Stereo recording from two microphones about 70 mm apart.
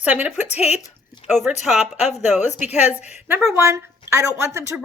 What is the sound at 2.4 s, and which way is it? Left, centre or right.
Speech, right.